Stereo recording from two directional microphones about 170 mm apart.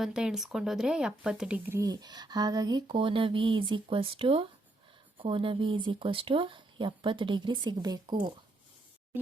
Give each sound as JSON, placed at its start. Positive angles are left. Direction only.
{"t": 0.0, "sound": "speech", "side_deg": -5}